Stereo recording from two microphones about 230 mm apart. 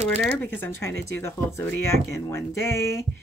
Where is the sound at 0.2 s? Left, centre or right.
Centre.